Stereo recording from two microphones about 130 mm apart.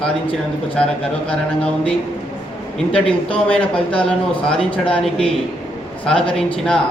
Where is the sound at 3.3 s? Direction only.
10° left (ahead or behind).